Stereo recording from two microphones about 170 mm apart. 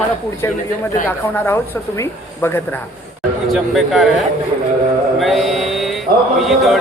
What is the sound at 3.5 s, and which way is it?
Speech, centre (ahead or behind).